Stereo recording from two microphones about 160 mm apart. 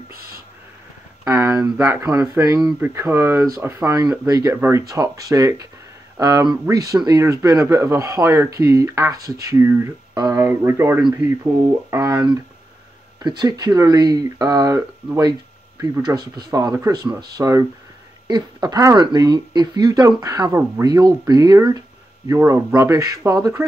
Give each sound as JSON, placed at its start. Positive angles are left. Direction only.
{"t": 1.2, "sound": "speech", "side_deg": -15}
{"t": 11.0, "sound": "speech", "side_deg": -5}
{"t": 11.9, "sound": "speech", "side_deg": -20}
{"t": 13.2, "sound": "speech", "side_deg": -25}